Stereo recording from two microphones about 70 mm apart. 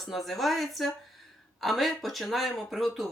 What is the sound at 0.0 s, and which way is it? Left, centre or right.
Speech, centre.